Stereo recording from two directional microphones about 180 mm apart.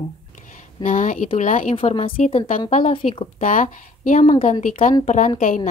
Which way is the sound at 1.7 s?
30° left (ahead or behind).